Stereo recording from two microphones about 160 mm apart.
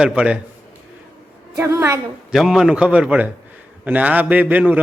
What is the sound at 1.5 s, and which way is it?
Speech, 15° right (ahead or behind).